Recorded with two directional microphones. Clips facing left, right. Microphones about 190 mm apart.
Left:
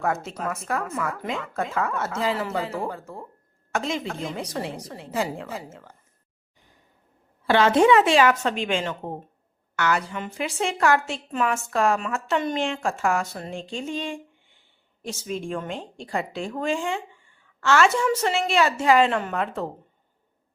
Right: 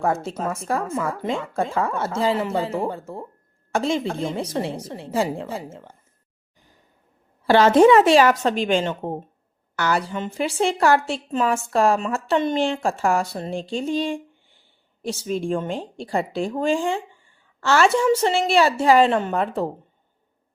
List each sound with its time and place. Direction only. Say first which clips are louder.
0.0 s speech: right 3 dB; 30° right (ahead or behind)
7.4 s a woman's voice: right 4 dB; 40° right (ahead or behind)